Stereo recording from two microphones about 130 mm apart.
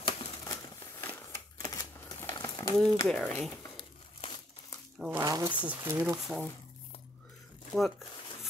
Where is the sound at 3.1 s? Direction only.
5° left (ahead or behind).